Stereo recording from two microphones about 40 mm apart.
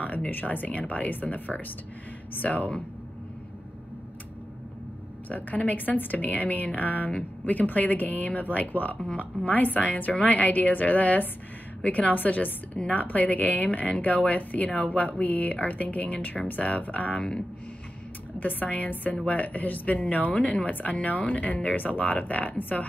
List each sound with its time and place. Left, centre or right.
0.3 s speech: left
5.3 s speech: left
18.4 s speech: left